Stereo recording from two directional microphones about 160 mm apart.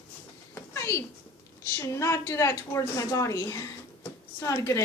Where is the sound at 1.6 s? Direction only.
20° left (ahead or behind).